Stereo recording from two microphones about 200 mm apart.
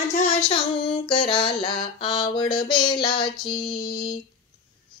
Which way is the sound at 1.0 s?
25° left (ahead or behind).